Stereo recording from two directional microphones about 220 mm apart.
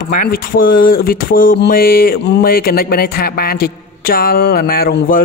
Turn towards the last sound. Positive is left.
turn(degrees=40)  # may be behind; listen again after turning